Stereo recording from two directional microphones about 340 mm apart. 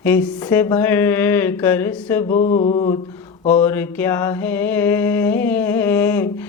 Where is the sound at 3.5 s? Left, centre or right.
Centre.